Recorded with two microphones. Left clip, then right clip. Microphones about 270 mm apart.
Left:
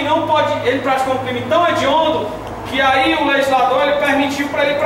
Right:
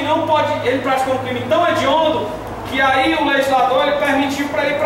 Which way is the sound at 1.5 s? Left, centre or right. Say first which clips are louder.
Left 1 dB; centre.